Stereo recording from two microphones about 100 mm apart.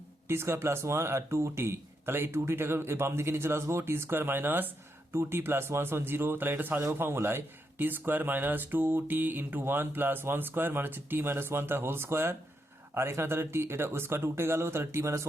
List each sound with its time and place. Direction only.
0.3 s speech: 25° right (ahead or behind)